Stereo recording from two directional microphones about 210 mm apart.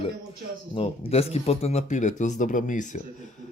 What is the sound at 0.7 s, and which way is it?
Speech, 30° left (ahead or behind).